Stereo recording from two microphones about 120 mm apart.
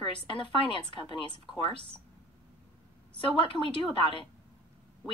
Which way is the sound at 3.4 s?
45° left (ahead or behind).